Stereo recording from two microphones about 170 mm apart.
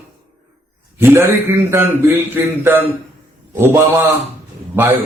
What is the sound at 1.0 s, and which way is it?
A man's voice, 15° right (ahead or behind).